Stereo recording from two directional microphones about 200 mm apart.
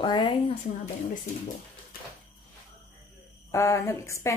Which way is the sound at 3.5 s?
15° left (ahead or behind).